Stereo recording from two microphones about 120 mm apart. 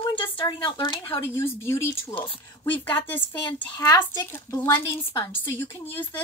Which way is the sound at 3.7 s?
35° left (ahead or behind).